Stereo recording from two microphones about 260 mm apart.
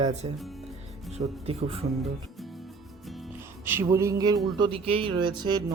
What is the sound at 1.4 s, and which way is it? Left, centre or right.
Speech, right.